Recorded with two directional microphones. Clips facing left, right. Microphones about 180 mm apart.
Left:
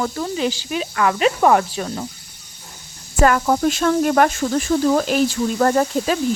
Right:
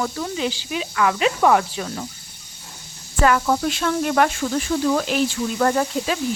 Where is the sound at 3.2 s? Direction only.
45° left (ahead or behind).